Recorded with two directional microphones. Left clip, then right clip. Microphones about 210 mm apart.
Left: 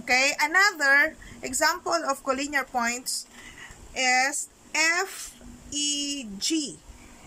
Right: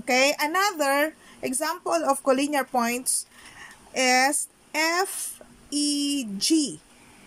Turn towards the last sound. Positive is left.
turn(degrees=-20)  # may be behind; listen again after turning